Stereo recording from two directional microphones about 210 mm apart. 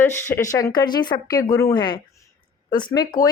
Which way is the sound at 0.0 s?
10° left (ahead or behind).